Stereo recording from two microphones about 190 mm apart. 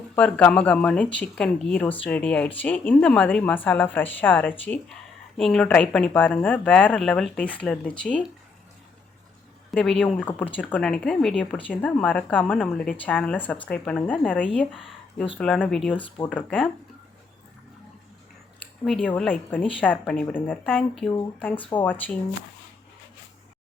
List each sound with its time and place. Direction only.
0.2 s a woman's voice: 5° left (ahead or behind)
9.7 s a woman's voice: centre (ahead or behind)
16.0 s speech: 25° left (ahead or behind)
16.3 s speech: centre (ahead or behind)
19.0 s a woman's voice: 5° left (ahead or behind)
21.1 s a woman's voice: 15° left (ahead or behind)
21.6 s speech: 25° left (ahead or behind)
21.8 s a woman's voice: 10° left (ahead or behind)